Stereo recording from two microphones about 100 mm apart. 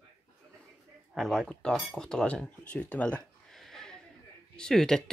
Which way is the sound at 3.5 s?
5° left (ahead or behind).